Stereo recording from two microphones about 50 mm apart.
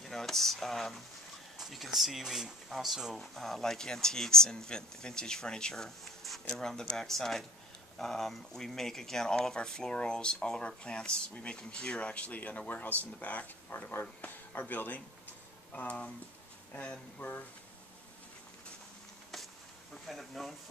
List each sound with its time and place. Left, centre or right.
0.0 s speech: centre
3.2 s speech: centre; by 16.1 s left
17.2 s speech: left
19.3 s a sound: centre